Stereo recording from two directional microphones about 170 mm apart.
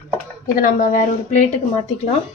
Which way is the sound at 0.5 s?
50° left (ahead or behind).